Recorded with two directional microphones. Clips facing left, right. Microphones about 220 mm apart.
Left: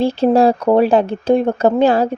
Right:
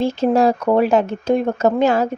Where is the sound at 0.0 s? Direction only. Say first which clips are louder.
Left 3 dB; 30° left (ahead or behind).